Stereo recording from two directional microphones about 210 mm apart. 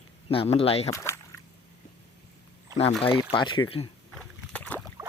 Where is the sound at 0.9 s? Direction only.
15° left (ahead or behind).